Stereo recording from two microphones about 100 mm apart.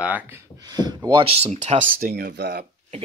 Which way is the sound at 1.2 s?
85° right.